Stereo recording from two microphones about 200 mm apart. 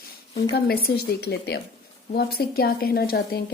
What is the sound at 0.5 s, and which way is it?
A woman's voice, 50° left (ahead or behind).